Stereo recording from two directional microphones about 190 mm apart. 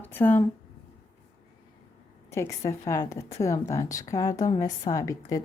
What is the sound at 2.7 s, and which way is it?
A woman's voice, 15° left (ahead or behind).